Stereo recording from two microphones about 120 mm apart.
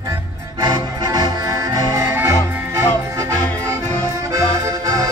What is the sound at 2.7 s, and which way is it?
Music, 25° right (ahead or behind).